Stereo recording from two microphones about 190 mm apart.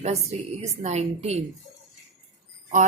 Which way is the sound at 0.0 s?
35° right (ahead or behind).